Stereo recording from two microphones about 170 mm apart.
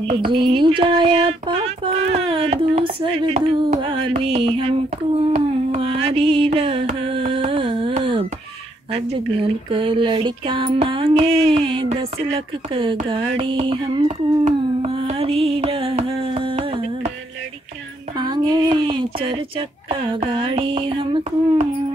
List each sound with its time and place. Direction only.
0.0 s music: 30° right (ahead or behind)
5.3 s carnatic music: 35° right (ahead or behind)
8.9 s music: 35° right (ahead or behind)
14.4 s carnatic music: 35° right (ahead or behind)
18.1 s speech: 25° right (ahead or behind)
19.9 s music: 30° right (ahead or behind)